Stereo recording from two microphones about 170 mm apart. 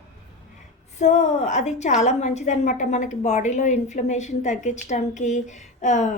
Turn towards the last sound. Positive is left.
turn(degrees=45)  # may be behind; listen again after turning